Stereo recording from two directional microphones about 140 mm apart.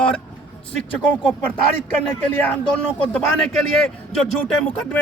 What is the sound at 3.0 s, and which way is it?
Speech, 10° left (ahead or behind).